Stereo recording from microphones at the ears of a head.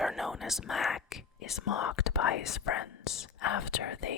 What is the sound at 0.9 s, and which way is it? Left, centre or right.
Speech, left.